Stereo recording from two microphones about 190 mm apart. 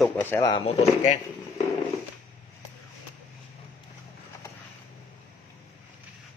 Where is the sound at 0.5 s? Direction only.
35° left (ahead or behind).